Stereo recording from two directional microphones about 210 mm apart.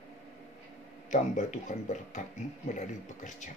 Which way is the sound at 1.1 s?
35° left (ahead or behind).